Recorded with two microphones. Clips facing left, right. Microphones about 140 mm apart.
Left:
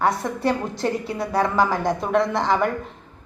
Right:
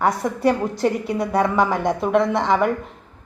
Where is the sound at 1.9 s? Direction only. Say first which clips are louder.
Right 2 dB; centre (ahead or behind).